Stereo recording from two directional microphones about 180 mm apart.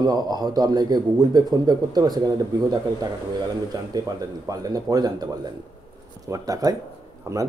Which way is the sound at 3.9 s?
20° right (ahead or behind).